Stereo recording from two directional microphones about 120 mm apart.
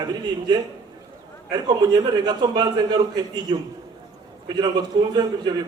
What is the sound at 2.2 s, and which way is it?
A man's voice, 35° right (ahead or behind).